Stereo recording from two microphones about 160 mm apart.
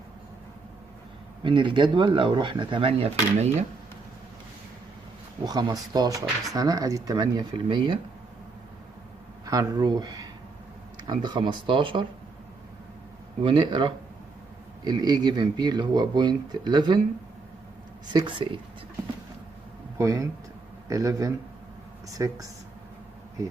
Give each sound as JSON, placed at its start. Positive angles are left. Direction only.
{"t": 1.4, "sound": "speech", "side_deg": -30}
{"t": 5.4, "sound": "speech", "side_deg": -25}
{"t": 9.5, "sound": "speech", "side_deg": -20}
{"t": 13.4, "sound": "speech", "side_deg": -30}
{"t": 18.1, "sound": "speech", "side_deg": -30}
{"t": 20.0, "sound": "speech", "side_deg": -20}